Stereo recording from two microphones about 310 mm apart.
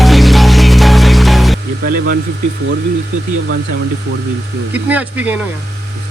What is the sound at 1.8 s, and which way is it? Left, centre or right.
Speech, right.